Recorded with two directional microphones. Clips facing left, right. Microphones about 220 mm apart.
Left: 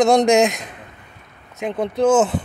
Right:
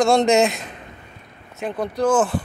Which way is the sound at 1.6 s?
25° left (ahead or behind).